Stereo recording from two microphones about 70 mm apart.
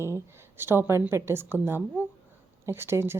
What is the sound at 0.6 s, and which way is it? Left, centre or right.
A woman's voice, right.